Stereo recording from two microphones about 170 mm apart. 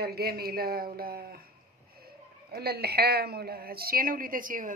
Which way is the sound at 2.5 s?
65° right (ahead or behind).